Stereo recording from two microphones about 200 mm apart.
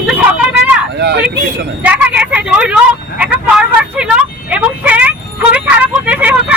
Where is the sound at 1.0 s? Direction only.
55° right (ahead or behind).